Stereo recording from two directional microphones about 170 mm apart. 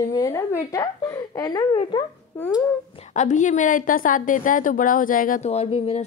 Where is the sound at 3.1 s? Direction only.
45° left (ahead or behind).